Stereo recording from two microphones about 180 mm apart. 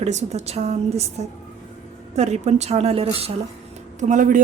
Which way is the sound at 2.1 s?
40° right (ahead or behind).